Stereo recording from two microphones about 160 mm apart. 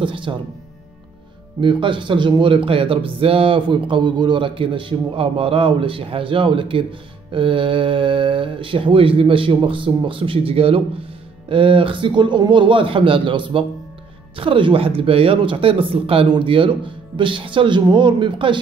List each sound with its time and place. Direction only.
0.0 s speech: 30° right (ahead or behind)
1.6 s speech: 30° right (ahead or behind)